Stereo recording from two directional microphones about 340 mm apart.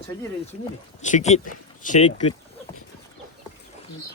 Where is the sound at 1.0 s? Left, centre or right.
Left.